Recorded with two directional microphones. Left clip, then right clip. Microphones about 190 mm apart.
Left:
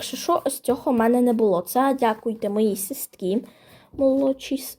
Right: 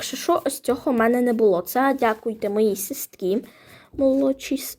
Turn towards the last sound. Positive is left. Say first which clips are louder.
# right 1 dB
turn(degrees=-10)  # may be behind; listen again after turning